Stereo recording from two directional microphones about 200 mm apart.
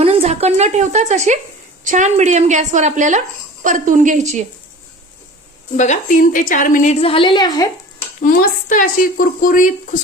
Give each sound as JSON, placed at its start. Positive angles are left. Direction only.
{"t": 0.0, "sound": "speech", "side_deg": -30}
{"t": 5.7, "sound": "a woman's voice", "side_deg": 35}
{"t": 8.2, "sound": "speech", "side_deg": 45}